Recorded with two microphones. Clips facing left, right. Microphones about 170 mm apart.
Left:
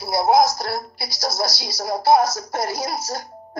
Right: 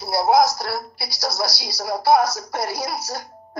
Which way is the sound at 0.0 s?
20° left (ahead or behind).